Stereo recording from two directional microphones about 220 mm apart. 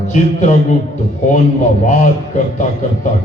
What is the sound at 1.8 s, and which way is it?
Speech, 35° left (ahead or behind).